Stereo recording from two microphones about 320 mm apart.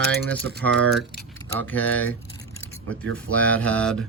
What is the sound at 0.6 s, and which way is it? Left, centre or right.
Speech, centre.